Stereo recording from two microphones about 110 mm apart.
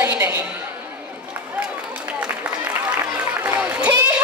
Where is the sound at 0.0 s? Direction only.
15° right (ahead or behind).